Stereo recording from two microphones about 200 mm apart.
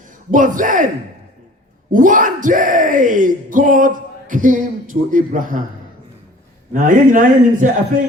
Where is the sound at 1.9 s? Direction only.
40° right (ahead or behind).